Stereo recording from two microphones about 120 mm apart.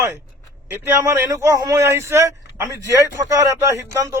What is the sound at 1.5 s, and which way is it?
Speech, 35° right (ahead or behind).